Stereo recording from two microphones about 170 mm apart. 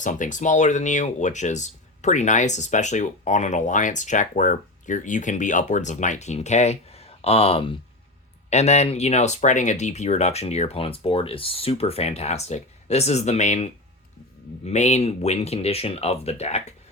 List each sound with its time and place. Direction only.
0.0 s speech: 50° left (ahead or behind)